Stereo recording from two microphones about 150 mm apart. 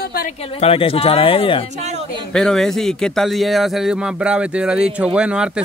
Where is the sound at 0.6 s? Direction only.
40° left (ahead or behind).